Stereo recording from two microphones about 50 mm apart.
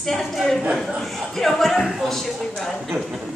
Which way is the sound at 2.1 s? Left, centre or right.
Centre.